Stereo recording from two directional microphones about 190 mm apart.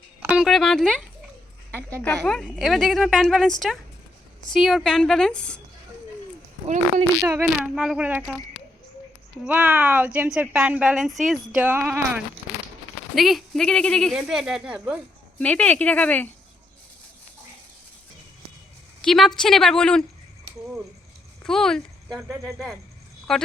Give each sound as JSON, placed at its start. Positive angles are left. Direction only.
{"t": 0.2, "sound": "speech", "side_deg": -5}
{"t": 7.2, "sound": "a woman's voice", "side_deg": -15}
{"t": 9.4, "sound": "a woman's voice", "side_deg": -10}
{"t": 15.4, "sound": "speech", "side_deg": 5}
{"t": 19.0, "sound": "a woman's voice", "side_deg": 0}
{"t": 21.4, "sound": "speech", "side_deg": 5}
{"t": 22.3, "sound": "a woman's voice", "side_deg": -15}
{"t": 23.3, "sound": "speech", "side_deg": 0}